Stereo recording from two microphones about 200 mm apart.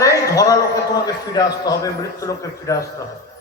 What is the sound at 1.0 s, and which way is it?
A man's voice, 20° left (ahead or behind).